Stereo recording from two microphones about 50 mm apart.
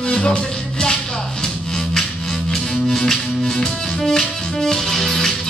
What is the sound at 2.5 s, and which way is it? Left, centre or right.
Music, centre.